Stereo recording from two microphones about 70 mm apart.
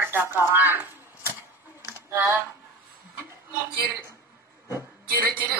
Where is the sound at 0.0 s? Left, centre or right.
Right.